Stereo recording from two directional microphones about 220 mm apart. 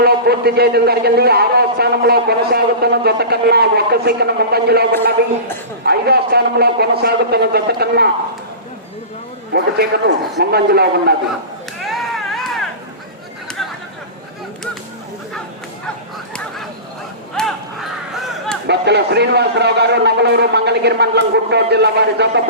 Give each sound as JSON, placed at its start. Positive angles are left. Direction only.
{"t": 0.0, "sound": "a man's voice", "side_deg": -45}
{"t": 9.5, "sound": "a man's voice", "side_deg": -45}
{"t": 11.8, "sound": "a sound", "side_deg": 0}
{"t": 17.3, "sound": "battle cry", "side_deg": 0}
{"t": 18.7, "sound": "a man's voice", "side_deg": -50}